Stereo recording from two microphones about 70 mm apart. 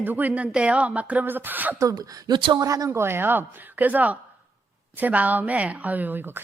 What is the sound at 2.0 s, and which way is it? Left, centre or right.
Speech, right.